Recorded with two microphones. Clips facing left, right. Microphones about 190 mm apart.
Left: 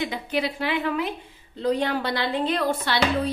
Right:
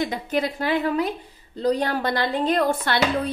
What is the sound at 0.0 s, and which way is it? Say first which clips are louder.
A woman's voice: right 2 dB; 45° right (ahead or behind).